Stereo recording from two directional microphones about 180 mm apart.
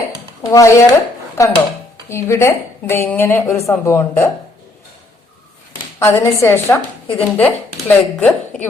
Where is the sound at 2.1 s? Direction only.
15° left (ahead or behind).